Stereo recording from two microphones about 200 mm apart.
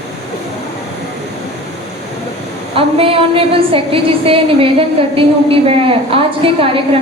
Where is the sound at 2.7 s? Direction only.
30° right (ahead or behind).